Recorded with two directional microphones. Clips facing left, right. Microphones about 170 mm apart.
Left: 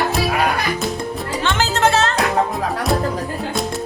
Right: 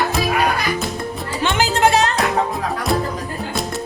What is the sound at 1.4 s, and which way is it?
Music, 15° right (ahead or behind).